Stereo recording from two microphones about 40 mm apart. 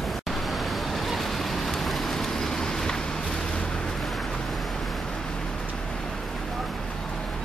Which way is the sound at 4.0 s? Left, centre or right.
Centre.